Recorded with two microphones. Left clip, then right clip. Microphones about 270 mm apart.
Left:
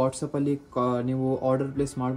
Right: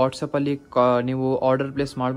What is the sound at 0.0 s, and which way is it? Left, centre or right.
Speech, right.